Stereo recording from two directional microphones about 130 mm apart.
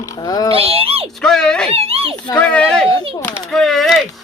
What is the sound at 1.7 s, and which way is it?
Speech, 50° right (ahead or behind).